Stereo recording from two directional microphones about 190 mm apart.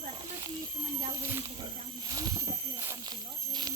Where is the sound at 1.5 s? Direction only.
25° right (ahead or behind).